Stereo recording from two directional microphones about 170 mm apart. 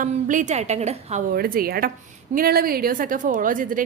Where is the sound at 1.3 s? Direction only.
60° right (ahead or behind).